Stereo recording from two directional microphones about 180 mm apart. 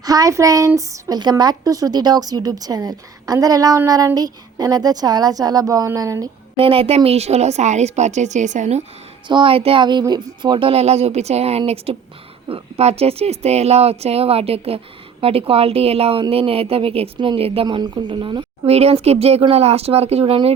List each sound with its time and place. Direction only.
0.0 s a woman's voice: 20° right (ahead or behind)
6.6 s a woman's voice: 30° right (ahead or behind)
9.2 s a woman's voice: 25° right (ahead or behind)